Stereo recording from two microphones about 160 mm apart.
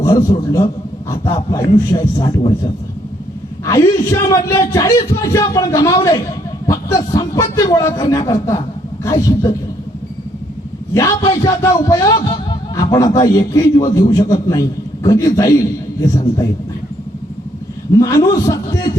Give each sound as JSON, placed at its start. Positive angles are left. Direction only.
{"t": 0.0, "sound": "a man's voice", "side_deg": 20}
{"t": 3.7, "sound": "a man's voice", "side_deg": 20}
{"t": 10.9, "sound": "a man's voice", "side_deg": 20}
{"t": 17.9, "sound": "a man's voice", "side_deg": 20}